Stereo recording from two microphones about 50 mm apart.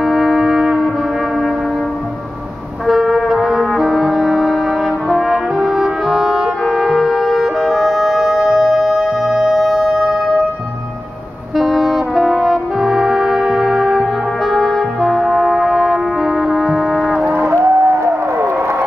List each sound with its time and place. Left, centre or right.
0.0 s wind instrument: centre
2.9 s brass instrument: centre
6.6 s music: centre
11.5 s brass instrument: centre
17.3 s music: right
17.6 s a sound: right